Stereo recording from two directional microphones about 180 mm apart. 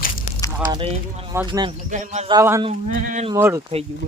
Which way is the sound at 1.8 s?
40° right (ahead or behind).